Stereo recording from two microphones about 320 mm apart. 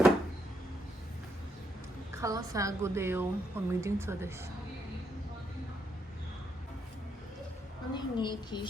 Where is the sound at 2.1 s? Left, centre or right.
Centre.